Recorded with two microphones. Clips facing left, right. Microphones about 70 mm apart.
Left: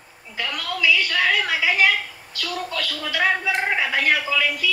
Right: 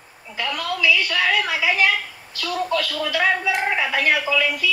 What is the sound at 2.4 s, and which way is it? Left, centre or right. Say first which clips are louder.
Speech: right 5 dB; centre.